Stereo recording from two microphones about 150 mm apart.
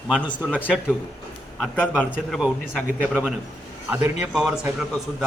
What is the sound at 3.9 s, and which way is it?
A man's voice, 10° right (ahead or behind).